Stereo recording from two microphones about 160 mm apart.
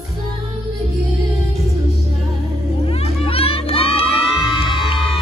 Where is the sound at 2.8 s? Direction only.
40° left (ahead or behind).